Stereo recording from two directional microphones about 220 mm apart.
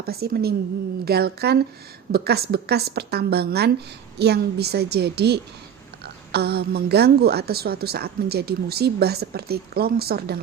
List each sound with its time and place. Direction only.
0.0 s a woman's voice: 45° right (ahead or behind)